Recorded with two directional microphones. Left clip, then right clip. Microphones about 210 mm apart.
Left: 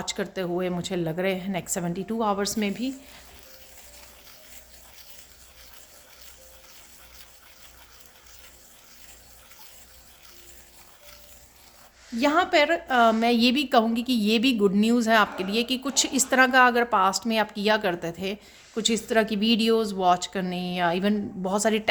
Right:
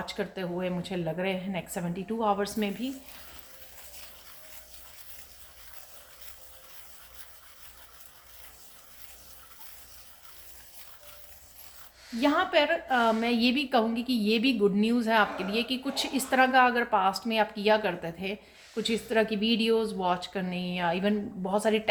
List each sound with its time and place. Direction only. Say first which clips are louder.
0.0 s a woman's voice: left 4 dB; 45° left (ahead or behind)
12.2 s a woman's voice: left 4 dB; 50° left (ahead or behind)